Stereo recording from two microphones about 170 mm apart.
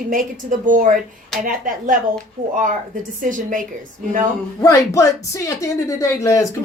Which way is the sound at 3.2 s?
50° right (ahead or behind).